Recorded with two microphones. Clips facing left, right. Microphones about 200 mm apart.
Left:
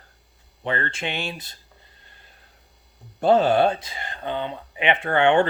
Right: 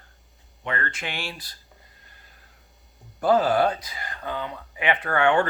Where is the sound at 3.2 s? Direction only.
25° left (ahead or behind).